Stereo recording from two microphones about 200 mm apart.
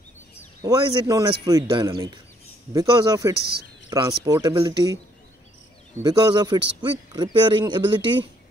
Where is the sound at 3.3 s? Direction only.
50° right (ahead or behind).